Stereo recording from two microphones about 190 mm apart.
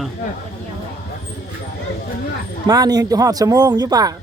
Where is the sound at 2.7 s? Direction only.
20° right (ahead or behind).